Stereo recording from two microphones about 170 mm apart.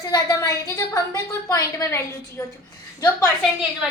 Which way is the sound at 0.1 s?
20° left (ahead or behind).